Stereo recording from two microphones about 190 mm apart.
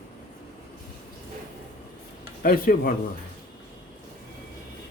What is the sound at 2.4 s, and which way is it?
Speech, 50° left (ahead or behind).